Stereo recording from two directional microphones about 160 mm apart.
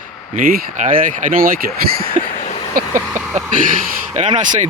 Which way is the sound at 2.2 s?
45° left (ahead or behind).